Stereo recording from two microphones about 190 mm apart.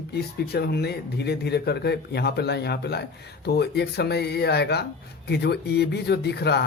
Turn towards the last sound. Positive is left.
turn(degrees=60)  # may be behind; listen again after turning